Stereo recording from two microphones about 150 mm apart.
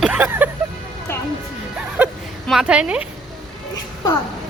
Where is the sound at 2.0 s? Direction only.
5° right (ahead or behind).